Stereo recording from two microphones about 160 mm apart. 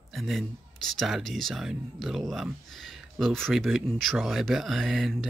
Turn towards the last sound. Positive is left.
turn(degrees=0)  # may be behind; listen again after turning